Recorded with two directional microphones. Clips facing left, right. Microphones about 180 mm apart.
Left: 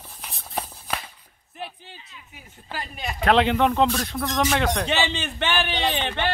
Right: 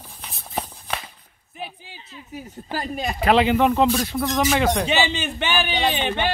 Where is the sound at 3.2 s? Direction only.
5° right (ahead or behind).